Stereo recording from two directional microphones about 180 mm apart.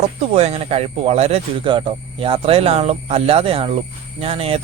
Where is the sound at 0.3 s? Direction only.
35° right (ahead or behind).